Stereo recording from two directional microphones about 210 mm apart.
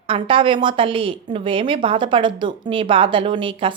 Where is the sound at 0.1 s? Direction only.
25° right (ahead or behind).